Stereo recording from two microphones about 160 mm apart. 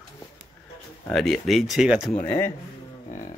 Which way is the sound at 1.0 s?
5° left (ahead or behind).